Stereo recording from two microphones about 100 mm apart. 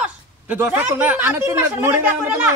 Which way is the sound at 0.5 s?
20° right (ahead or behind).